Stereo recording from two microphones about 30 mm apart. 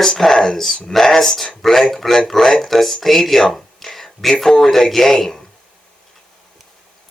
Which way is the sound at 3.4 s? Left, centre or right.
Centre.